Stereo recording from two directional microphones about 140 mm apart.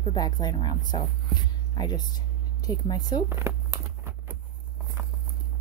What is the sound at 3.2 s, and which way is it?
Speech, 20° right (ahead or behind).